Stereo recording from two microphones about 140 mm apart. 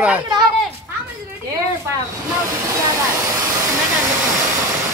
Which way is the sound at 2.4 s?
25° right (ahead or behind).